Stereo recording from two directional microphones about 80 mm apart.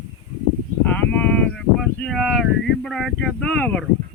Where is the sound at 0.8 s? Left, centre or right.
Left.